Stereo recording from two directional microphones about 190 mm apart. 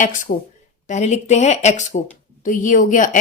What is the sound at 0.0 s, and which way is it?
A woman's voice, 40° left (ahead or behind).